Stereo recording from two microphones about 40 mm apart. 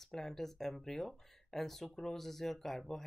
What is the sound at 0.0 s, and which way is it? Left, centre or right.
Speech, centre.